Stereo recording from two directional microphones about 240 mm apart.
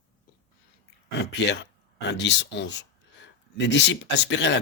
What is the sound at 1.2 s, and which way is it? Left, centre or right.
Speech, left.